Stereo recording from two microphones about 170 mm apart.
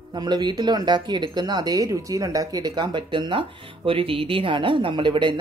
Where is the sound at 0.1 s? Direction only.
25° right (ahead or behind).